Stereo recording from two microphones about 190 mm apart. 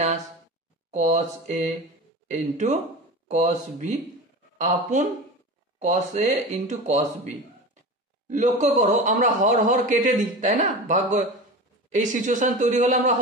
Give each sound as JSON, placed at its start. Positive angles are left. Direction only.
{"t": 0.9, "sound": "a man's voice", "side_deg": -40}
{"t": 8.5, "sound": "a man's voice", "side_deg": -40}